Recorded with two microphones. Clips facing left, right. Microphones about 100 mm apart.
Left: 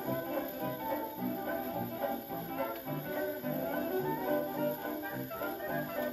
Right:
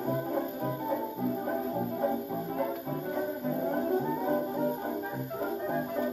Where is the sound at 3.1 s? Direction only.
15° right (ahead or behind).